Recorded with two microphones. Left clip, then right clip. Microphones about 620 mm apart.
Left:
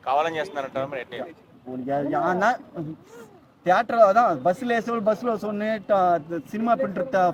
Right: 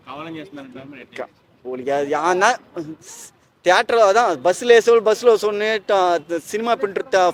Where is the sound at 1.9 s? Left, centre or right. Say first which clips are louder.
Right 5 dB; right.